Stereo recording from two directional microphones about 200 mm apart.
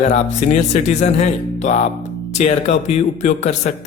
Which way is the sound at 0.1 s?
35° left (ahead or behind).